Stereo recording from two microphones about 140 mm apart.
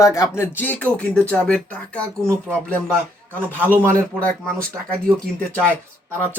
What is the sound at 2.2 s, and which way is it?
Speech, 20° right (ahead or behind).